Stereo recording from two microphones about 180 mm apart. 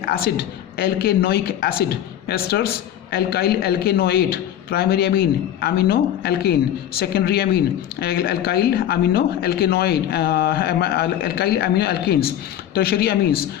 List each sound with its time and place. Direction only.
0.0 s a man's voice: 60° left (ahead or behind)